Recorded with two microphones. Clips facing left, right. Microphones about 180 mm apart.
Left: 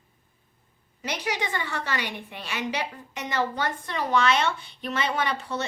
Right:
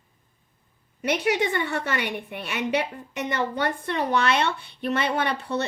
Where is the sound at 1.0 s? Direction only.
60° right (ahead or behind).